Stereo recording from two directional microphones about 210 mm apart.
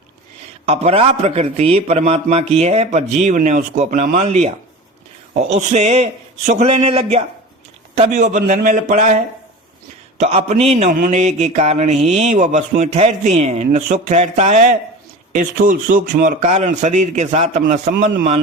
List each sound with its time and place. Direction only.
0.6 s mantra: 30° right (ahead or behind)